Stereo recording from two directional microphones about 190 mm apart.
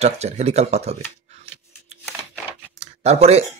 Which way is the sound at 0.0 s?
35° right (ahead or behind).